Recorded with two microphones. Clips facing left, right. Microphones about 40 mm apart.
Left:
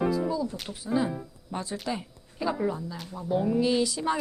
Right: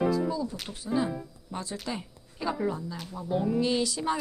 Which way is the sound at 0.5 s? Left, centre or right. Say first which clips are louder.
Left 1 dB; centre.